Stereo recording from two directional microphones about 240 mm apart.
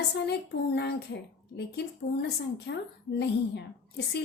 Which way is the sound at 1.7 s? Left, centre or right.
Left.